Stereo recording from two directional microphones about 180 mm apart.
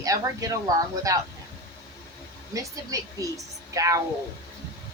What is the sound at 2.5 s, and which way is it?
Speech, 20° right (ahead or behind).